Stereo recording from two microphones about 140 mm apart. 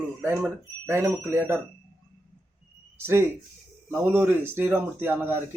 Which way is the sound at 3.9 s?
15° right (ahead or behind).